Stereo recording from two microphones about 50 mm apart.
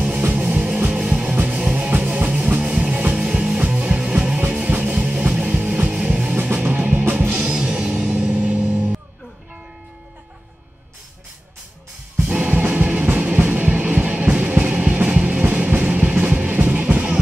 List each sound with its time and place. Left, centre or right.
0.0 s music: right
6.5 s music: right
7.3 s music: centre
12.2 s music: right